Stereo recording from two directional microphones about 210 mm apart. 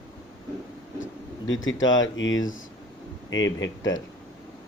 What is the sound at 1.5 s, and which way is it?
Speech, 70° left (ahead or behind).